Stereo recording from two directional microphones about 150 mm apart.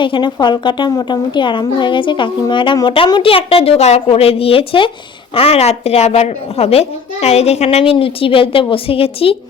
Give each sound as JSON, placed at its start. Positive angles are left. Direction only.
{"t": 0.0, "sound": "a child's voice", "side_deg": 30}